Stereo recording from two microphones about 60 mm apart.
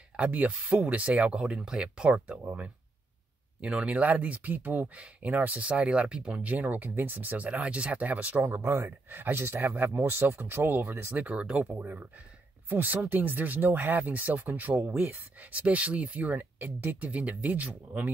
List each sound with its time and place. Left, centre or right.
0.1 s speech: right
2.1 s speech: right
5.7 s speech: centre
6.4 s speech: right
8.5 s speech: right
11.3 s speech: centre
11.6 s speech: right